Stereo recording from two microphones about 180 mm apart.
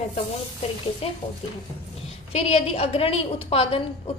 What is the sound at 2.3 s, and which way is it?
A woman's voice, 35° left (ahead or behind).